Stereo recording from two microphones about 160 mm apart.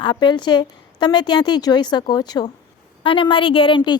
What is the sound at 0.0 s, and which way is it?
A woman's voice, 30° left (ahead or behind).